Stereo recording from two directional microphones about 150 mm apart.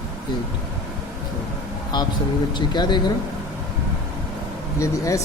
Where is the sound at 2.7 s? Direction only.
30° left (ahead or behind).